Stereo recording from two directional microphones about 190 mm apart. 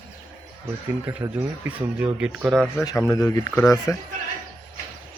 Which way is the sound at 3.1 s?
20° left (ahead or behind).